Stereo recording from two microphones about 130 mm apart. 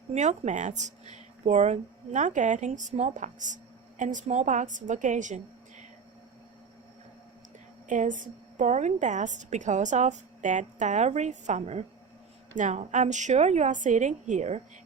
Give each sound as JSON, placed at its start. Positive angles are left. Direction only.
{"t": 0.1, "sound": "speech", "side_deg": -65}
{"t": 7.9, "sound": "a woman's voice", "side_deg": -80}
{"t": 12.5, "sound": "a woman's voice", "side_deg": -70}